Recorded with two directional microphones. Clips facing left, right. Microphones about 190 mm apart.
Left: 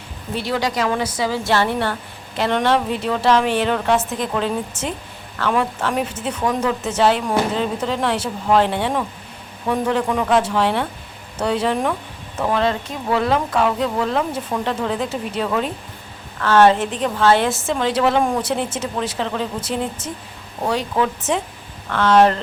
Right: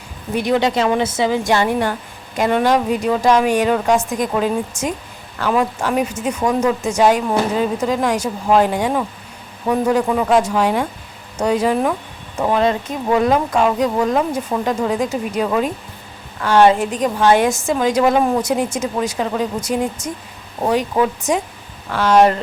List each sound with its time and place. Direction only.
0.3 s speech: 20° right (ahead or behind)